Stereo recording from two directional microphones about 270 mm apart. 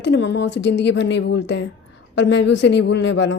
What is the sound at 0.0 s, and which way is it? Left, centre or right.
A woman's voice, left.